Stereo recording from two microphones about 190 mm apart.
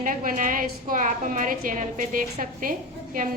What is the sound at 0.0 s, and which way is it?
A woman's voice, 45° right (ahead or behind).